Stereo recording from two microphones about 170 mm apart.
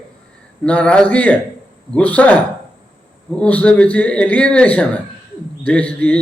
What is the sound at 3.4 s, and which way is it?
Speech, 5° left (ahead or behind).